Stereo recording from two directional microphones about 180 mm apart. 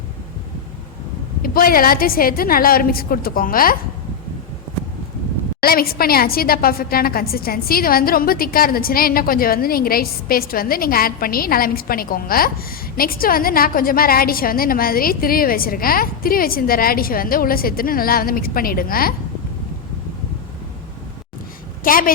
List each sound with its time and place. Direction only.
1.4 s a woman's voice: 55° left (ahead or behind)
5.6 s a woman's voice: 55° left (ahead or behind)
21.8 s a woman's voice: 50° left (ahead or behind)